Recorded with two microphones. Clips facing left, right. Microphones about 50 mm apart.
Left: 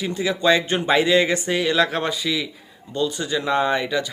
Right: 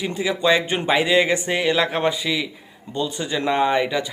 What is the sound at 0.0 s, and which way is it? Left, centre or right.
Speech, centre.